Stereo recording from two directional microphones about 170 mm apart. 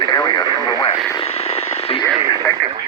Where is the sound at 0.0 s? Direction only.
25° left (ahead or behind).